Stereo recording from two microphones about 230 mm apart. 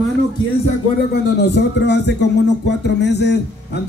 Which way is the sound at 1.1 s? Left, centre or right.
Left.